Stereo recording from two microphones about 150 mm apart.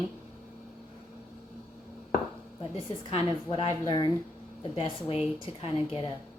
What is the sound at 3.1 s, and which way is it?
A woman's voice, 35° left (ahead or behind).